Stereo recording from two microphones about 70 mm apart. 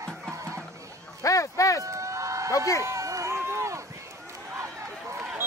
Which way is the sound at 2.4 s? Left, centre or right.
Left.